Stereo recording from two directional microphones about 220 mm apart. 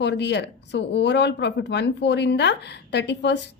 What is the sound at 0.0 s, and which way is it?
Speech, 50° left (ahead or behind).